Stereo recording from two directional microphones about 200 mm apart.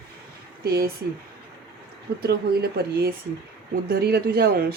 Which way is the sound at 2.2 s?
55° right (ahead or behind).